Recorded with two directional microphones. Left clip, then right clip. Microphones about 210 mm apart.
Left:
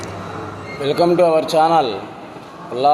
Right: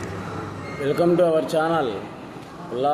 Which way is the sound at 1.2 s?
10° right (ahead or behind).